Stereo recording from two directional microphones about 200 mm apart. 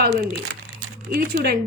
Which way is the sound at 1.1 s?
45° right (ahead or behind).